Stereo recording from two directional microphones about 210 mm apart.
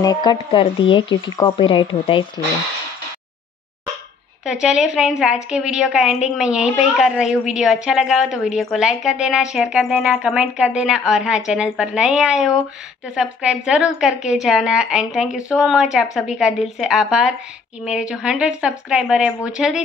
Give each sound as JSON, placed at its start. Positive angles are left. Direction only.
{"t": 0.0, "sound": "speech", "side_deg": 20}
{"t": 4.5, "sound": "a woman's voice", "side_deg": -5}